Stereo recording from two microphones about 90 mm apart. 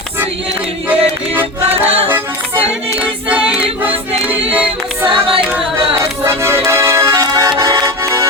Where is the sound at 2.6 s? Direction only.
15° right (ahead or behind).